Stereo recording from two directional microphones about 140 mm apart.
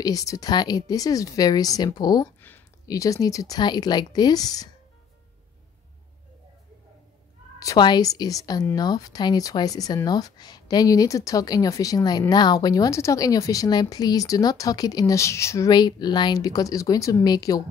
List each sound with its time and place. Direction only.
0.0 s a woman's voice: 25° left (ahead or behind)
7.5 s a woman's voice: 25° left (ahead or behind)